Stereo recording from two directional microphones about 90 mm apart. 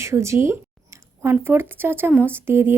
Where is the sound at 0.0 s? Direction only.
30° right (ahead or behind).